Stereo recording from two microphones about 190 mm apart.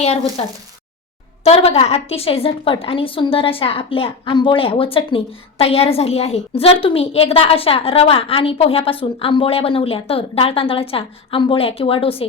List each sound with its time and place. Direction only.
0.0 s speech: 35° left (ahead or behind)
1.5 s a woman's voice: 30° left (ahead or behind)